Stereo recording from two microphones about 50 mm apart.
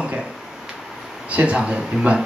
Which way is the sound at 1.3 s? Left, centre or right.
Right.